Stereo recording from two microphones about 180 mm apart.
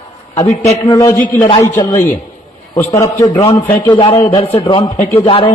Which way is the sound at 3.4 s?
35° left (ahead or behind).